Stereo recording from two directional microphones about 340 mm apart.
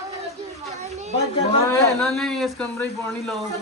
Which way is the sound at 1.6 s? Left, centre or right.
Centre.